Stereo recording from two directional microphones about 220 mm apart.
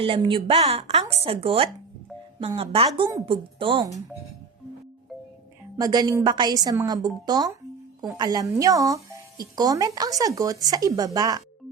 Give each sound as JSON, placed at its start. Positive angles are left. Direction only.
{"t": 0.0, "sound": "speech", "side_deg": -25}
{"t": 5.7, "sound": "speech", "side_deg": -15}